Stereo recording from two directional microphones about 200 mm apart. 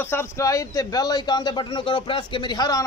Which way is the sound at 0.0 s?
10° left (ahead or behind).